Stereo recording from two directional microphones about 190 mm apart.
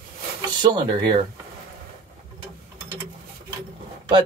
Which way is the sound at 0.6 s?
25° right (ahead or behind).